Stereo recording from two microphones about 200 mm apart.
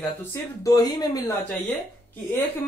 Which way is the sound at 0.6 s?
20° left (ahead or behind).